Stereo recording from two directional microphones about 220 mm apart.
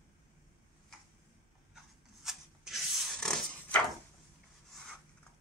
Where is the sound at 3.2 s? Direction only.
5° left (ahead or behind).